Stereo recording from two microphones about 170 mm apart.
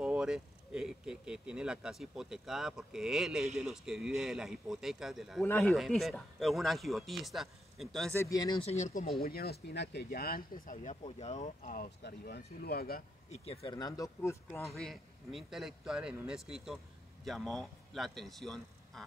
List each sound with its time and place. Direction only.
0.0 s speech: 5° right (ahead or behind)
5.4 s speech: 10° left (ahead or behind)
5.7 s speech: centre (ahead or behind)
8.1 s speech: 20° left (ahead or behind)
8.6 s speech: 45° left (ahead or behind)
9.2 s speech: 65° left (ahead or behind)
12.6 s speech: 65° left (ahead or behind)
13.3 s speech: 35° left (ahead or behind)
13.7 s speech: 20° left (ahead or behind)
14.7 s speech: centre (ahead or behind)